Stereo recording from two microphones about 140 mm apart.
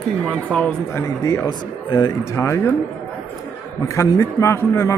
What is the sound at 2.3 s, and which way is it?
Speech, 20° left (ahead or behind).